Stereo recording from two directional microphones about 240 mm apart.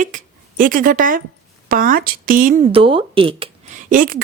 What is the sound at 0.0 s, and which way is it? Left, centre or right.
A woman's voice, right.